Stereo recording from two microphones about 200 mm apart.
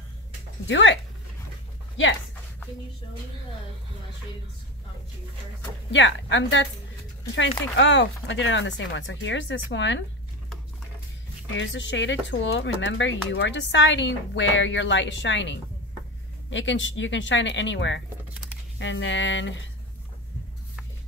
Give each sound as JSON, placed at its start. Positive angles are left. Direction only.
{"t": 0.7, "sound": "speech", "side_deg": 65}
{"t": 5.9, "sound": "speech", "side_deg": 65}
{"t": 11.5, "sound": "speech", "side_deg": 65}